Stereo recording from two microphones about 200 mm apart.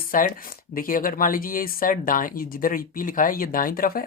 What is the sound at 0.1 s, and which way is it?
Speech, 45° left (ahead or behind).